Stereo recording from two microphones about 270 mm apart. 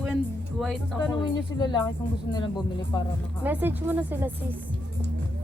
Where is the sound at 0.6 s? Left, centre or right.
Centre.